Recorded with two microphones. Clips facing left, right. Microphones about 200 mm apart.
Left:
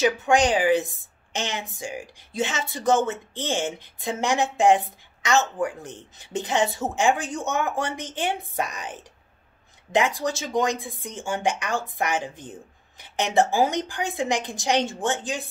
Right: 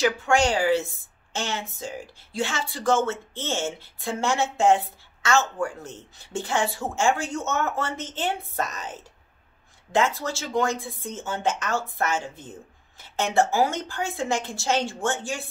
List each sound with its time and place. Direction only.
0.0 s a woman's voice: 20° left (ahead or behind)